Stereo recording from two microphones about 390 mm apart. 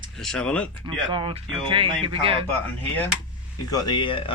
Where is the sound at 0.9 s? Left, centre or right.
Centre.